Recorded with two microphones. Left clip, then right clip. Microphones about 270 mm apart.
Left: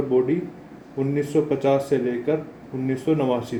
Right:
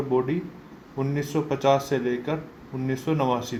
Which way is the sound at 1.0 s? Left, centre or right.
Right.